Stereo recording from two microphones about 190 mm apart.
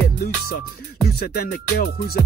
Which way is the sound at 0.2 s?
50° left (ahead or behind).